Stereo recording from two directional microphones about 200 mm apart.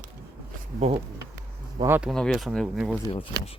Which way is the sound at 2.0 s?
Centre (ahead or behind).